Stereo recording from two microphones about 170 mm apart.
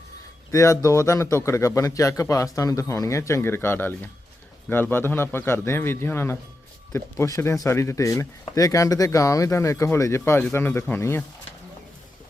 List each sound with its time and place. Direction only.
0.5 s speech: 20° left (ahead or behind)